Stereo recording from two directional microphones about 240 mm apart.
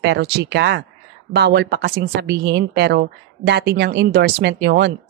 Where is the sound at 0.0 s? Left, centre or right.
Right.